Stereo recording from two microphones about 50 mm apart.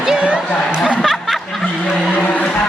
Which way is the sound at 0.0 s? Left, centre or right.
Centre.